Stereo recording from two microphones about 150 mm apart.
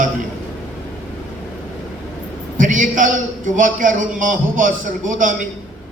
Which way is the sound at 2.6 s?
60° right (ahead or behind).